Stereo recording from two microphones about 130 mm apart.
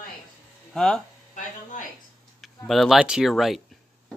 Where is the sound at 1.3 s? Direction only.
85° left.